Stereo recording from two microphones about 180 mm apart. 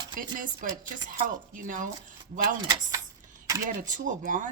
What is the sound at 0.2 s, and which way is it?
Speech, 50° right (ahead or behind).